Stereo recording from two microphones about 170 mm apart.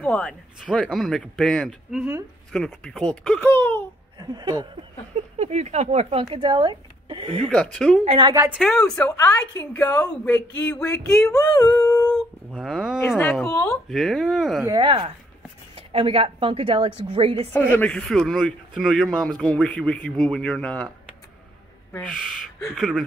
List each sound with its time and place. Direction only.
0.0 s speech: 5° left (ahead or behind)
4.2 s speech: 25° right (ahead or behind)
5.4 s speech: 40° right (ahead or behind)
6.2 s a woman's voice: 30° right (ahead or behind)
7.4 s speech: 5° left (ahead or behind)
8.0 s speech: 35° right (ahead or behind)
8.5 s speech: 5° left (ahead or behind)
12.4 s speech: 5° right (ahead or behind); by 13.7 s 10° left (ahead or behind)
13.8 s speech: centre (ahead or behind)
14.6 s speech: 25° right (ahead or behind)
17.5 s speech: 10° left (ahead or behind)
22.8 s speech: centre (ahead or behind)